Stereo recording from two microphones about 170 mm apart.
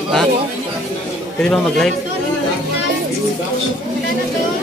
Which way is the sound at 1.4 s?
5° left (ahead or behind).